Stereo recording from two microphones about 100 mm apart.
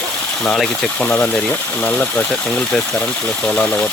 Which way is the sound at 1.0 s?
20° left (ahead or behind).